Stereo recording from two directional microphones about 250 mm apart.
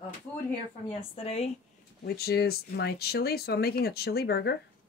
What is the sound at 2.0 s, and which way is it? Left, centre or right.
Speech, left.